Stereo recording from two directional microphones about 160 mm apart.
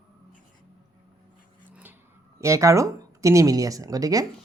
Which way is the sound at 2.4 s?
20° right (ahead or behind).